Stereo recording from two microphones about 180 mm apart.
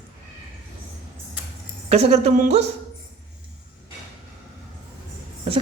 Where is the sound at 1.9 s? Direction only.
35° right (ahead or behind).